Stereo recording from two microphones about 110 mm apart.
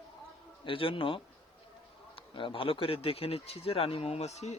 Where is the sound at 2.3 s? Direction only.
50° left (ahead or behind); by 4.5 s 85° left.